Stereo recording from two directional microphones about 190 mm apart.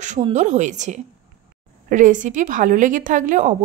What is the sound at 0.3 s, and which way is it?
A woman's voice, 40° right (ahead or behind).